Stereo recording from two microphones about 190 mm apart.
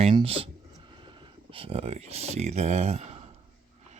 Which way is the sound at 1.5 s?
30° right (ahead or behind).